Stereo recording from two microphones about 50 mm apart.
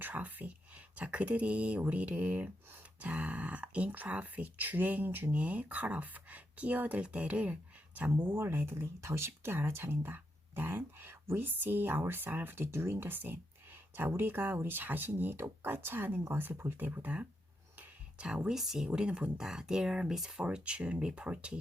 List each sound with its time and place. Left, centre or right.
0.0 s speech: right
8.3 s speech: right
9.0 s speech: right
11.4 s speech: right
18.4 s speech: centre
18.9 s speech: centre
20.4 s speech: right